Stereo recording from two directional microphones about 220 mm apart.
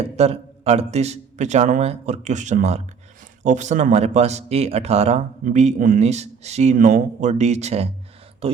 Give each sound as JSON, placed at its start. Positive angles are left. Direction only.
{"t": 0.0, "sound": "speech", "side_deg": -30}